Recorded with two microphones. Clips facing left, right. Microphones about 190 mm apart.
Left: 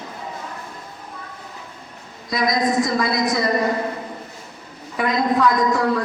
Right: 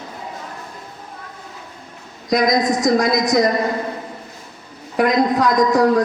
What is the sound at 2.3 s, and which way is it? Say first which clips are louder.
A woman's voice: right 3 dB; 45° right (ahead or behind).